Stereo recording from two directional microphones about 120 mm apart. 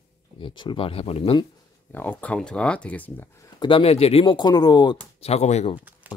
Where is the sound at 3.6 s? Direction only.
50° left (ahead or behind).